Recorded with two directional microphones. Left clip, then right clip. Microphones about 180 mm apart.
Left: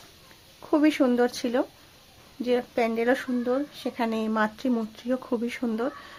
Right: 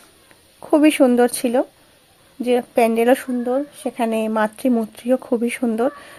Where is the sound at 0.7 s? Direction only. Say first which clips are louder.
Right 8 dB; 35° right (ahead or behind).